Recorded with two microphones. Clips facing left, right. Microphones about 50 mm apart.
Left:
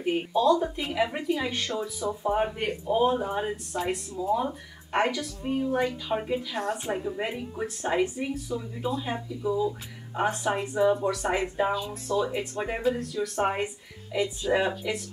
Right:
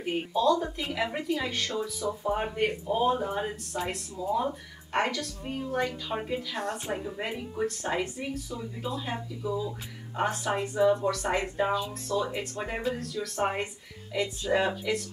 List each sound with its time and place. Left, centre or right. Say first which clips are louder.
0.0 s speech: left 2 dB; centre